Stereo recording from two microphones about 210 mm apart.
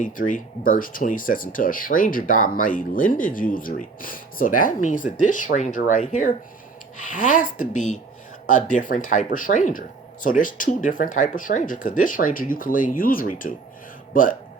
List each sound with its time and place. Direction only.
0.0 s speech: 40° left (ahead or behind)